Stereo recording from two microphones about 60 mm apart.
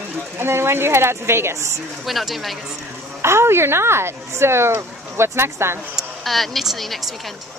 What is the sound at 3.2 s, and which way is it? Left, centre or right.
Speech, right.